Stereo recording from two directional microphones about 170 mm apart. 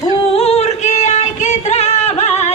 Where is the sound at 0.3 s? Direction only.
40° left (ahead or behind).